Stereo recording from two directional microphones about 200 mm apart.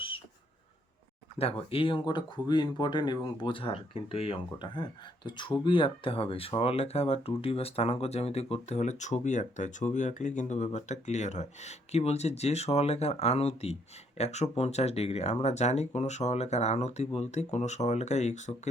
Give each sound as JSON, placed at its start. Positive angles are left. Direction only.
{"t": 1.4, "sound": "speech", "side_deg": 30}